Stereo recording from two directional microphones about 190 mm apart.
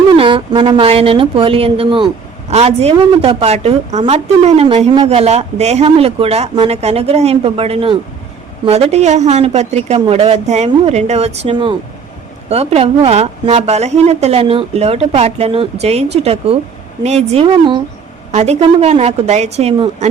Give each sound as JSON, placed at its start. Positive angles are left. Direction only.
{"t": 0.1, "sound": "a woman's voice", "side_deg": -25}